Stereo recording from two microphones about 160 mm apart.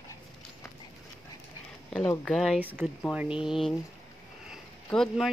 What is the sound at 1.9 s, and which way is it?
Speech, 5° left (ahead or behind).